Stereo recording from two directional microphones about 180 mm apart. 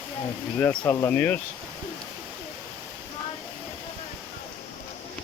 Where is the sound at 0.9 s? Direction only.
10° left (ahead or behind).